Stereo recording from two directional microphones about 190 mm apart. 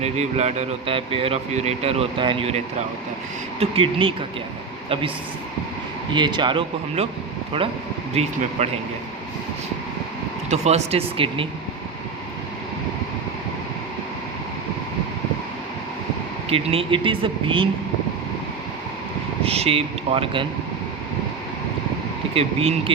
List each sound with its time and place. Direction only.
0.0 s speech: 35° right (ahead or behind)
6.1 s speech: 25° right (ahead or behind)
8.1 s speech: 35° right (ahead or behind)
10.5 s speech: 35° right (ahead or behind)
16.5 s speech: 30° right (ahead or behind)
19.4 s speech: 30° right (ahead or behind)
22.4 s speech: 30° right (ahead or behind)